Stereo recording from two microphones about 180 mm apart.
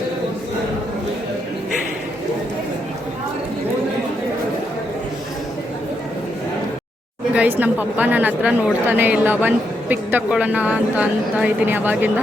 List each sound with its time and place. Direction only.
7.3 s a woman's voice: 10° right (ahead or behind)